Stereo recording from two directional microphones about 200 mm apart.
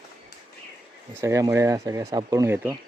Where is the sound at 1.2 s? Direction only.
15° right (ahead or behind).